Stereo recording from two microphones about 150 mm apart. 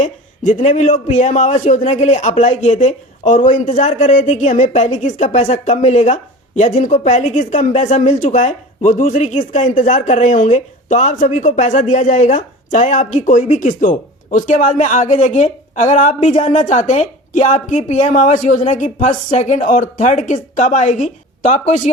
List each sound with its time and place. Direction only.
0.0 s speech: 50° left (ahead or behind)